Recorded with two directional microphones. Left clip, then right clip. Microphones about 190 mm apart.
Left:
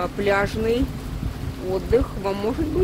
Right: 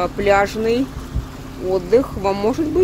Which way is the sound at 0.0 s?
20° right (ahead or behind).